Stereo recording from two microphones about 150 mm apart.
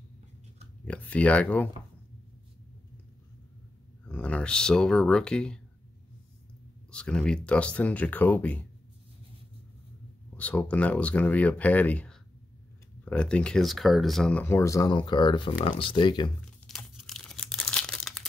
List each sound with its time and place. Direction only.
0.8 s speech: 10° left (ahead or behind)
4.0 s speech: 10° left (ahead or behind)
6.9 s speech: 5° left (ahead or behind)
10.3 s speech: 10° left (ahead or behind); by 16.3 s 30° left (ahead or behind)
16.6 s crumpling: centre (ahead or behind)